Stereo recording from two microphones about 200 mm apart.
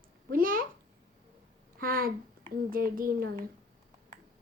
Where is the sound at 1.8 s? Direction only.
45° right (ahead or behind).